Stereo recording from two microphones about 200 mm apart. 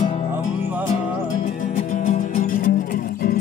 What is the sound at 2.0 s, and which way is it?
Music, 40° left (ahead or behind).